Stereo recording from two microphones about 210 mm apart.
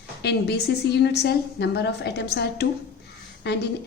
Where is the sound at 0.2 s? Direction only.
50° left (ahead or behind).